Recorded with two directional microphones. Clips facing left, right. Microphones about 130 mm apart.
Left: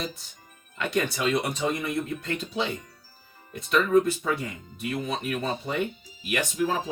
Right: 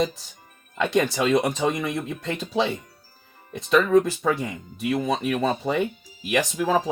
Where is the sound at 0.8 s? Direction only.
90° right.